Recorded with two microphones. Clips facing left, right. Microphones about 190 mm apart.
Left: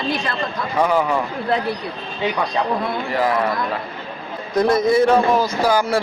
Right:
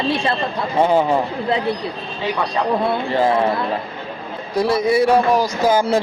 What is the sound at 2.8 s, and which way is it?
Speech, 30° right (ahead or behind).